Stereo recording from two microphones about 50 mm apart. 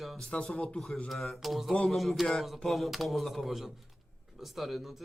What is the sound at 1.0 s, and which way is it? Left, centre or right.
Speech, centre.